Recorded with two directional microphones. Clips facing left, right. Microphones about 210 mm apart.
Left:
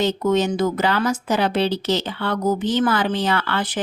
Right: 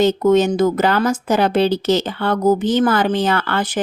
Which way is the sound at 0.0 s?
50° right (ahead or behind).